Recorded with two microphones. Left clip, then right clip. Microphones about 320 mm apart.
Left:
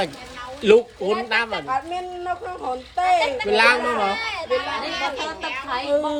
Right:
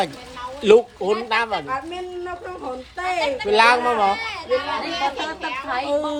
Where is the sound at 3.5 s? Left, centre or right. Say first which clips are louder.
Right 2 dB; centre.